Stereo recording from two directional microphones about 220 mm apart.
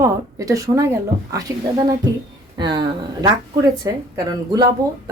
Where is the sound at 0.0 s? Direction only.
15° right (ahead or behind).